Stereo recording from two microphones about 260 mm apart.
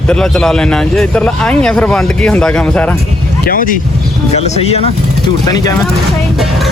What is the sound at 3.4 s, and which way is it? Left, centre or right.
Speech, left.